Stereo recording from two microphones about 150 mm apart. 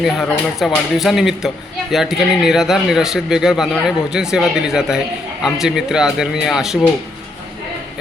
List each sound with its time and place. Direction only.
0.0 s speech: centre (ahead or behind)